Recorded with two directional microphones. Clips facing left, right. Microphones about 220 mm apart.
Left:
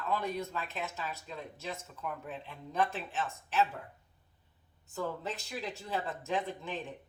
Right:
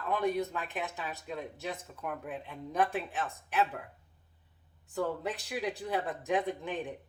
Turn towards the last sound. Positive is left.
turn(degrees=-15)  # may be behind; listen again after turning